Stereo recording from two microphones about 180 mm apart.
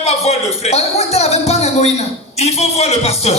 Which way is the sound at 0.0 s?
35° left (ahead or behind).